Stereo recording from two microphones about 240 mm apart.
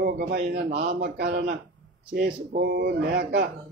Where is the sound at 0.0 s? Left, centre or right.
Right.